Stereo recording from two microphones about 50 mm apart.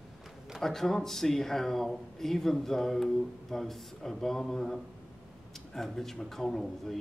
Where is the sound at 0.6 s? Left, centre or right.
Centre.